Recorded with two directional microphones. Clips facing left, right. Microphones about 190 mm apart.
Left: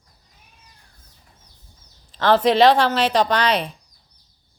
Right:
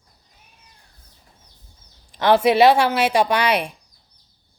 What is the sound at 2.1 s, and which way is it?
Speech, 10° right (ahead or behind).